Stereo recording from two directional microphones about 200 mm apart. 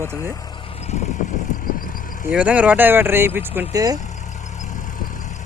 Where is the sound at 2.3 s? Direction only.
5° right (ahead or behind).